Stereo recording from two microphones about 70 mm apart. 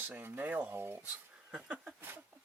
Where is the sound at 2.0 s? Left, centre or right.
Right.